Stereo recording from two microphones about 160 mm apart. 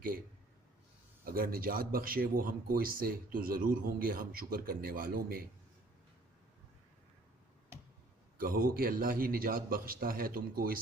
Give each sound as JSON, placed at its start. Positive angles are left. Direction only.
{"t": 1.2, "sound": "speech", "side_deg": -65}
{"t": 8.4, "sound": "speech", "side_deg": -60}